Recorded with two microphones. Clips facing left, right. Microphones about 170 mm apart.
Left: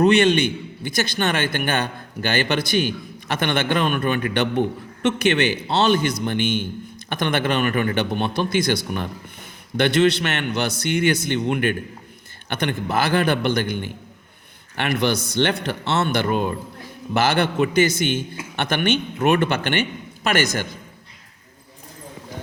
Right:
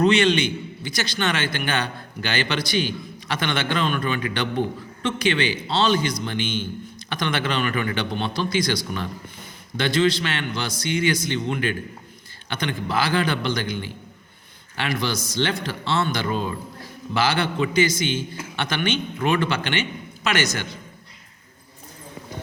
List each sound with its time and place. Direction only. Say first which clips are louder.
0.0 s a man's voice: left 3 dB; 55° left (ahead or behind)